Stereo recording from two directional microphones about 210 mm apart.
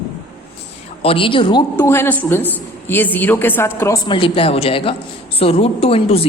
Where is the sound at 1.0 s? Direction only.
25° left (ahead or behind).